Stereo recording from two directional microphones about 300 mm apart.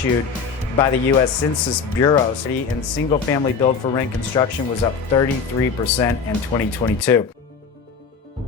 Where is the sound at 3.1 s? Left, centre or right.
Centre.